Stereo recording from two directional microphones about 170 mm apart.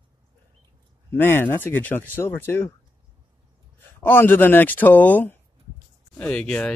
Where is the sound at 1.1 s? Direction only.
15° left (ahead or behind).